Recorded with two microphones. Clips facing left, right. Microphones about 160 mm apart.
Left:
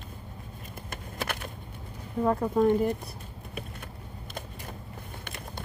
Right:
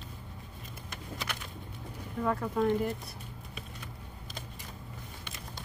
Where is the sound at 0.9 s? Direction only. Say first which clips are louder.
Left 5 dB; 55° left (ahead or behind).